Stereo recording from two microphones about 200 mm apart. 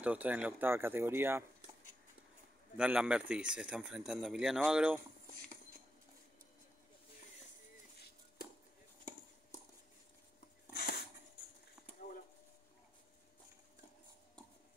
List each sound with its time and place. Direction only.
0.0 s speech: 5° right (ahead or behind)
2.8 s speech: 5° right (ahead or behind)
10.7 s a sound: 55° left (ahead or behind)